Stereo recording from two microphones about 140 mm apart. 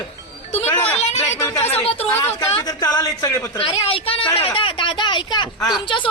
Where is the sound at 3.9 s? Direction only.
45° left (ahead or behind).